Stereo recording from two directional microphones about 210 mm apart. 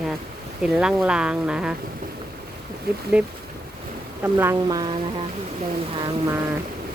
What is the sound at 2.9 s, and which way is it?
Speech, 50° right (ahead or behind).